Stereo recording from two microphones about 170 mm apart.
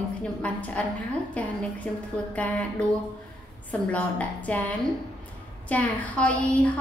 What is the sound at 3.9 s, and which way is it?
Speech, 10° left (ahead or behind).